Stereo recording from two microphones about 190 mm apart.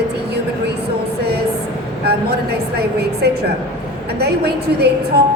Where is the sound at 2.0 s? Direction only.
55° right (ahead or behind).